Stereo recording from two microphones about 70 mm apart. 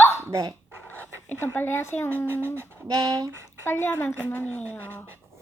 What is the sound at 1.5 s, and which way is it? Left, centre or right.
Speech, left.